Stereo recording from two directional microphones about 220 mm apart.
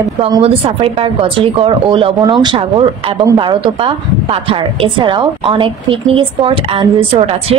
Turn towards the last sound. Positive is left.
turn(degrees=-25)  # may be behind; listen again after turning